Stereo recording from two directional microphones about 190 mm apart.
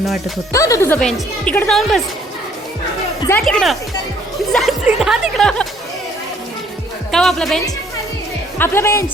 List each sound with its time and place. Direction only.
0.5 s speech: 15° left (ahead or behind)
0.9 s speech: 5° left (ahead or behind)
3.4 s speech: centre (ahead or behind)
7.1 s speech: 5° left (ahead or behind)